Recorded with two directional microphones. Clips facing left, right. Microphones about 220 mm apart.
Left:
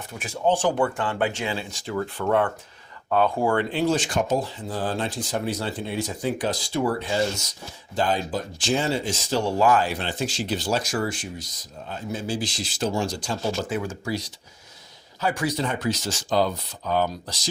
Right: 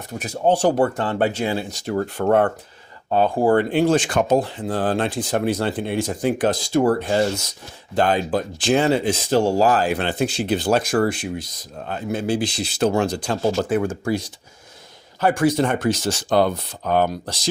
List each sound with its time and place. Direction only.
0.1 s speech: 40° right (ahead or behind)
3.1 s speech: 30° right (ahead or behind); by 7.2 s 50° right (ahead or behind)
7.9 s speech: 60° right (ahead or behind); by 9.8 s 35° right (ahead or behind)
9.8 s speech: 55° right (ahead or behind)